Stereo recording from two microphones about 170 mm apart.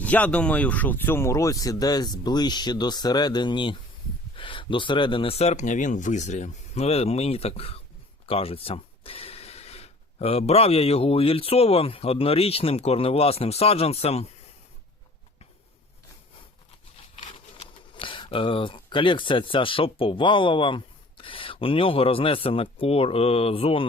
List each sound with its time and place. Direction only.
0.0 s speech: 10° left (ahead or behind); by 14.3 s 35° left (ahead or behind)
17.2 s speech: 35° left (ahead or behind)